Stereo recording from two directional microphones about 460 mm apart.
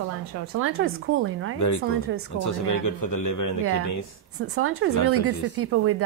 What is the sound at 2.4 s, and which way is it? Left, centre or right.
A man's voice, left.